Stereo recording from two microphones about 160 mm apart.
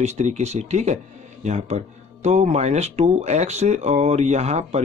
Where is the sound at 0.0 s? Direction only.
45° right (ahead or behind).